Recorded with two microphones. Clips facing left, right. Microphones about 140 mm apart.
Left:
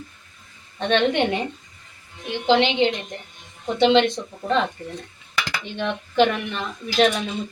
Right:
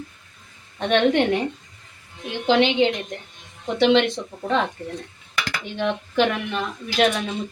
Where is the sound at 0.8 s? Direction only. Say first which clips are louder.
Right 1 dB; 5° right (ahead or behind).